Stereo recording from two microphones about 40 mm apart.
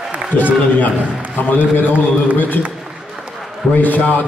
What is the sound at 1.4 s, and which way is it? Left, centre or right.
A man's voice, left.